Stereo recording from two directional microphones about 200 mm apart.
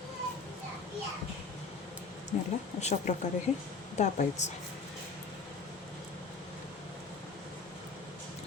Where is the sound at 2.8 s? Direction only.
35° left (ahead or behind).